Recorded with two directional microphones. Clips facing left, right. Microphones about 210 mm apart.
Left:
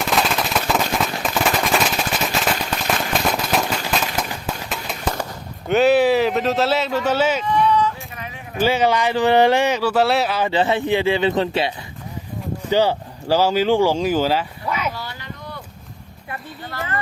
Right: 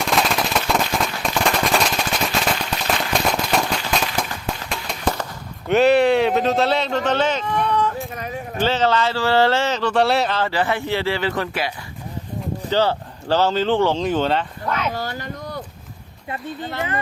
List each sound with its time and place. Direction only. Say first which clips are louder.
0.0 s machine gun: even; centre (ahead or behind)
5.6 s speech: even; centre (ahead or behind)
7.5 s a sound: left 3 dB; 55° right (ahead or behind)
8.5 s speech: left 2 dB; 10° left (ahead or behind)
10.5 s speech: left 3 dB; 20° left (ahead or behind)
12.7 s speech: left 2 dB; 15° left (ahead or behind)
14.9 s a sound: right 5 dB; 45° right (ahead or behind)
16.3 s speech: right 4 dB; 20° right (ahead or behind)